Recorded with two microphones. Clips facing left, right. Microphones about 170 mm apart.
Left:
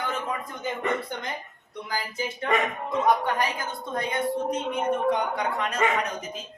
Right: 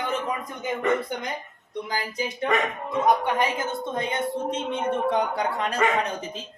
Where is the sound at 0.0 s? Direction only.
20° right (ahead or behind).